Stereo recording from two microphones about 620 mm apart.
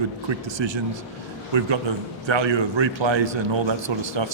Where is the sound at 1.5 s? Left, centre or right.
Right.